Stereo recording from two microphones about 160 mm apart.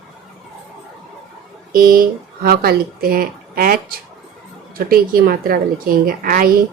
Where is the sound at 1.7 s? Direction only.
60° right (ahead or behind).